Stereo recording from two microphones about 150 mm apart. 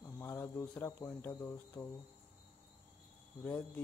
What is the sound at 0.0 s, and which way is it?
Speech, 15° left (ahead or behind).